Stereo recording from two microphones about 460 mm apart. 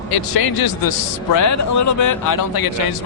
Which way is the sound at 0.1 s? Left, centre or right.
Left.